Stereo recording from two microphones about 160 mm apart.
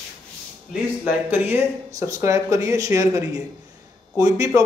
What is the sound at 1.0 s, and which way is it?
A man's voice, 10° right (ahead or behind).